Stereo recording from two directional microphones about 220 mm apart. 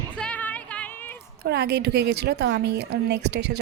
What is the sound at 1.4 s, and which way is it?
Speech, 50° right (ahead or behind).